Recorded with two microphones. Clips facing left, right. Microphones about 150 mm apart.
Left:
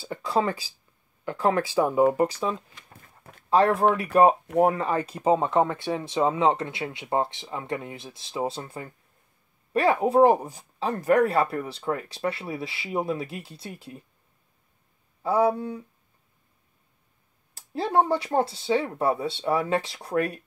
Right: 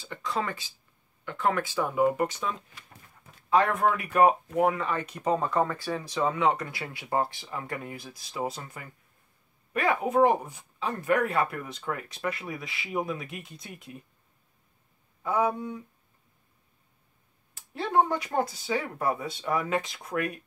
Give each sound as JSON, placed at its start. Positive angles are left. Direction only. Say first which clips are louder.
{"t": 0.0, "sound": "speech", "louder": "left 6 dB", "side_deg": 35}
{"t": 15.2, "sound": "speech", "louder": "left 4 dB", "side_deg": 35}
{"t": 17.6, "sound": "speech", "louder": "left 2 dB", "side_deg": 35}